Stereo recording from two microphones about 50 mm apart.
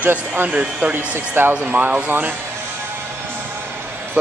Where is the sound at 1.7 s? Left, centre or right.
Right.